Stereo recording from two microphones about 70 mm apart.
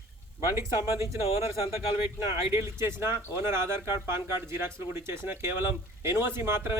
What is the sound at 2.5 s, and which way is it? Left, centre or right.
Speech, right.